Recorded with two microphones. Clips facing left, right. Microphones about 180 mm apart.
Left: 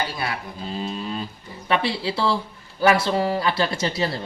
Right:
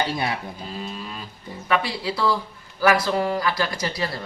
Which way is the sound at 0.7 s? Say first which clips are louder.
Left 7 dB; 25° left (ahead or behind).